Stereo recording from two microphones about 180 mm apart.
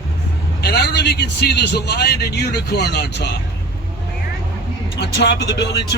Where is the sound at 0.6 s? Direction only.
65° left (ahead or behind).